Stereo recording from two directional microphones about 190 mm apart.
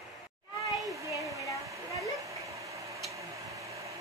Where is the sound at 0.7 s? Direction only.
Centre (ahead or behind).